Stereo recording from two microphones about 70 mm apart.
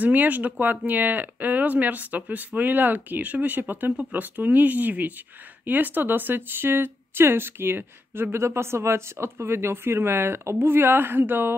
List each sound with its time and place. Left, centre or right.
0.0 s speech: right